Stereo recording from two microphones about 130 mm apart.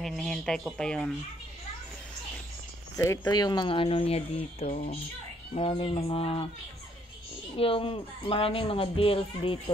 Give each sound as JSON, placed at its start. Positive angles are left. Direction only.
{"t": 0.0, "sound": "speech", "side_deg": 0}
{"t": 3.0, "sound": "speech", "side_deg": 30}
{"t": 7.5, "sound": "speech", "side_deg": 45}